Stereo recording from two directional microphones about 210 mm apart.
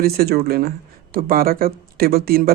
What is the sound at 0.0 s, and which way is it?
A man's voice, 45° right (ahead or behind).